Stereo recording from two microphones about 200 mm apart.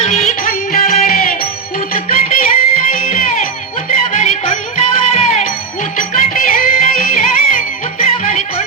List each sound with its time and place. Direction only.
0.0 s music: 35° left (ahead or behind)
5.1 s music: 35° left (ahead or behind)